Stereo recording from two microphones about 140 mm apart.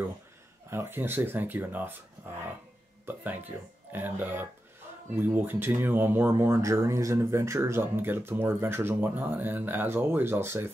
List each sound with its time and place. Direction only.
0.7 s speech: 15° right (ahead or behind)
3.1 s speech: 15° right (ahead or behind)